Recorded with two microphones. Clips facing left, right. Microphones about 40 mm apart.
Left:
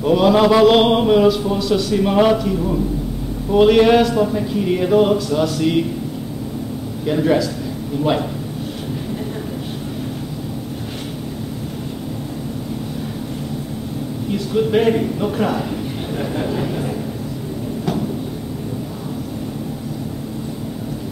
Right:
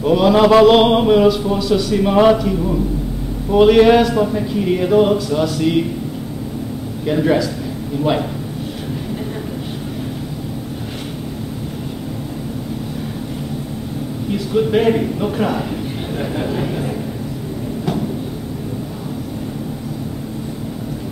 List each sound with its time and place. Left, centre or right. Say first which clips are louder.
0.0 s a man's voice: right 1 dB; centre
7.1 s a man's voice: right 1 dB; centre
14.3 s a man's voice: right 1 dB; centre